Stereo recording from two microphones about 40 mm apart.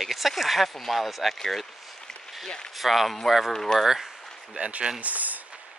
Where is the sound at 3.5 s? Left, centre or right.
Centre.